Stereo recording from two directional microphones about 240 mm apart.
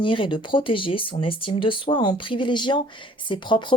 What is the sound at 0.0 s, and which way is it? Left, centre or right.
Speech, left.